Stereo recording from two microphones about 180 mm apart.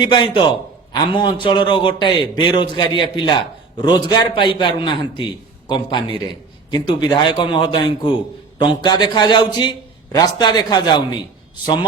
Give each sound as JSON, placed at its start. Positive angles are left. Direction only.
{"t": 0.0, "sound": "a man's voice", "side_deg": 25}